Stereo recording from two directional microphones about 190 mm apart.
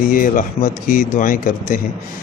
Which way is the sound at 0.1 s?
45° left (ahead or behind).